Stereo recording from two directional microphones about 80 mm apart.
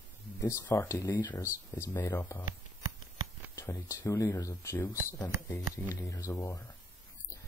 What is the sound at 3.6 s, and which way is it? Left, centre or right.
Speech, left.